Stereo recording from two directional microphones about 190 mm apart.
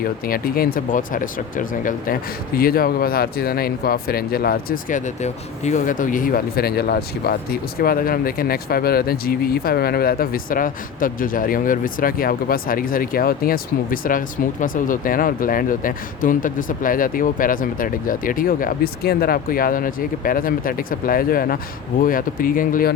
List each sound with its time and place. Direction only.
0.0 s speech: 50° left (ahead or behind)